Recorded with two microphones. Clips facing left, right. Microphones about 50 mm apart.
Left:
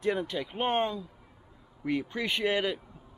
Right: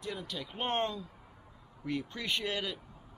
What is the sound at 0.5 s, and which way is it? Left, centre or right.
Speech, centre.